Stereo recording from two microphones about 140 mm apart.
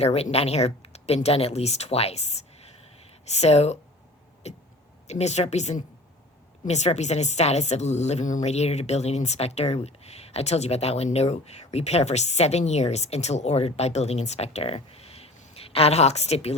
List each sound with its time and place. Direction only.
0.0 s a woman's voice: 50° left (ahead or behind)